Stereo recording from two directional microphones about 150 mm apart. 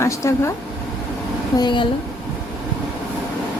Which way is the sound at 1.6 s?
35° left (ahead or behind).